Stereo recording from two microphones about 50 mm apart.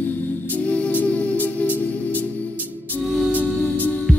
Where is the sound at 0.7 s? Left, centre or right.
Left.